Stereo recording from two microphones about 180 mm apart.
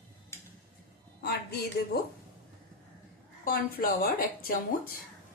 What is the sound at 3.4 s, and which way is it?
A woman's voice, 55° left (ahead or behind).